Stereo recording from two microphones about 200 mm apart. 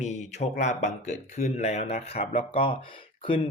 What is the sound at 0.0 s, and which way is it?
Speech, 35° left (ahead or behind).